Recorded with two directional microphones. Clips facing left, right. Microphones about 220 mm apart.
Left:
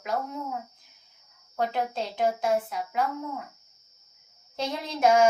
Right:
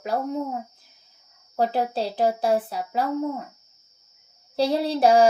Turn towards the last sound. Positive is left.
turn(degrees=-35)  # may be behind; listen again after turning